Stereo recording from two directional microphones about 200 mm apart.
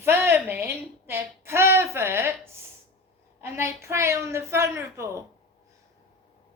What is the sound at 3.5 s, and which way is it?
A woman's voice, 15° right (ahead or behind).